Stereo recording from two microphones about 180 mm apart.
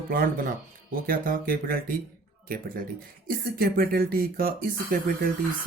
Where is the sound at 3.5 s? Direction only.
55° right (ahead or behind).